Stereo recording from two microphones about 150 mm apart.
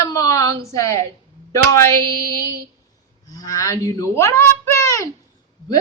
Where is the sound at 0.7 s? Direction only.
20° left (ahead or behind).